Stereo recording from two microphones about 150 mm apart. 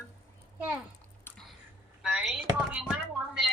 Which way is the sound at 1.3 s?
15° left (ahead or behind).